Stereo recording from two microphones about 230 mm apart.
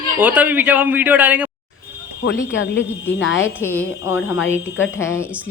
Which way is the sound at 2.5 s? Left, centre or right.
Left.